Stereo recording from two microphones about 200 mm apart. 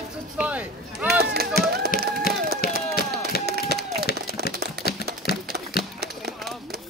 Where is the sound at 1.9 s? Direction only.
45° left (ahead or behind).